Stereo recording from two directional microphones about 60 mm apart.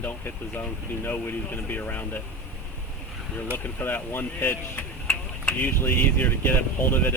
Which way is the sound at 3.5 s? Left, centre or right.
Left.